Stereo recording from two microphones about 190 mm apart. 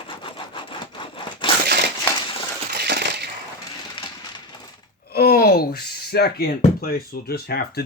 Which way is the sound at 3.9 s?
25° left (ahead or behind).